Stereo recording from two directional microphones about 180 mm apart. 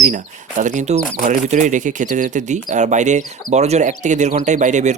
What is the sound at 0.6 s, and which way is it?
Speech, 40° right (ahead or behind).